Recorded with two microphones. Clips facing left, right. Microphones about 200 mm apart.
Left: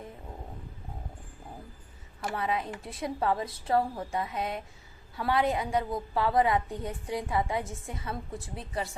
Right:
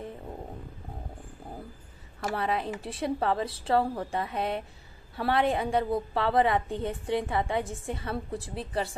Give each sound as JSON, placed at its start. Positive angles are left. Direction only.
{"t": 2.2, "sound": "a woman's voice", "side_deg": -35}